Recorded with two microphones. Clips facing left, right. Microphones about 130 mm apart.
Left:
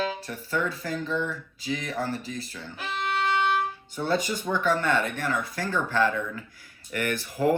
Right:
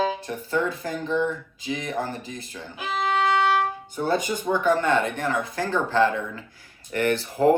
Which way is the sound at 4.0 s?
50° right (ahead or behind).